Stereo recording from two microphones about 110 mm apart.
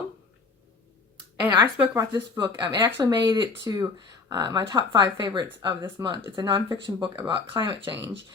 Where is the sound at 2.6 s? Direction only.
40° right (ahead or behind).